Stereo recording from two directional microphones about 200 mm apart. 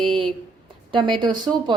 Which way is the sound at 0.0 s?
25° right (ahead or behind).